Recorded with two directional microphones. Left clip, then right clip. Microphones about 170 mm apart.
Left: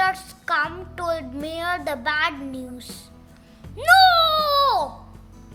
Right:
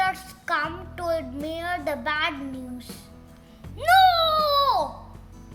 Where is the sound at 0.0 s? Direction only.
30° left (ahead or behind).